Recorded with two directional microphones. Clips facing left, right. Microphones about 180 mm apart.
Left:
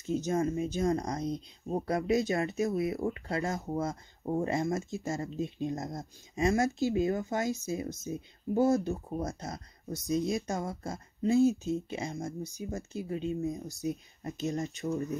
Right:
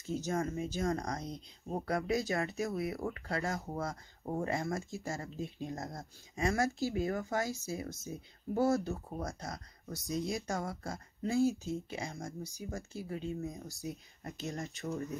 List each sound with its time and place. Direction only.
0.0 s speech: 20° left (ahead or behind)